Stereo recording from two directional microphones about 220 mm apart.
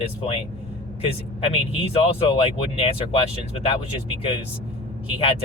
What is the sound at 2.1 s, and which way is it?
Speech, 25° left (ahead or behind).